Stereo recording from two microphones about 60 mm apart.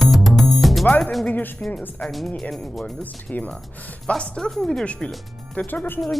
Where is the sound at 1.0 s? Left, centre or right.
Centre.